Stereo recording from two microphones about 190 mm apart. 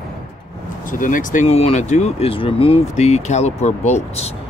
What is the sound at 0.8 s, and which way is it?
Speech, 45° left (ahead or behind).